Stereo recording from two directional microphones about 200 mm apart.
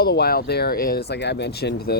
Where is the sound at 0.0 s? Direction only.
50° left (ahead or behind).